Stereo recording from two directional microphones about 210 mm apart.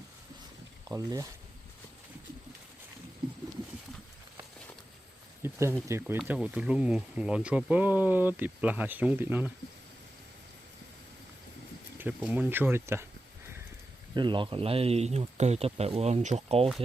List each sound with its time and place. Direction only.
0.9 s speech: 15° right (ahead or behind)
5.4 s a sound: 10° right (ahead or behind)
5.9 s speech: 10° right (ahead or behind)
11.9 s speech: 10° right (ahead or behind)
14.1 s speech: 20° right (ahead or behind)